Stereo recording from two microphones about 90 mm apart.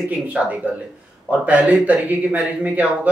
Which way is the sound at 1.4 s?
15° right (ahead or behind).